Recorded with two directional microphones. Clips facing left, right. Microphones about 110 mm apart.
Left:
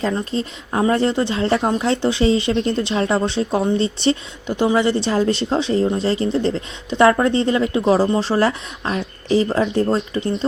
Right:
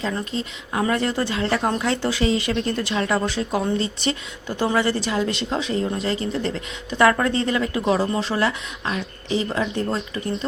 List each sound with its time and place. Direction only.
0.0 s speech: 35° left (ahead or behind)
4.4 s speech: 20° left (ahead or behind); by 9.8 s 35° left (ahead or behind)